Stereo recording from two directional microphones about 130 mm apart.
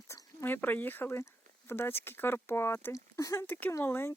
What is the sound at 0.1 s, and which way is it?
Speech, 20° left (ahead or behind).